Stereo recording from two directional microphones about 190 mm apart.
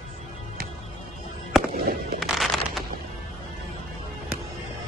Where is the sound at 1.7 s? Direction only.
50° right (ahead or behind).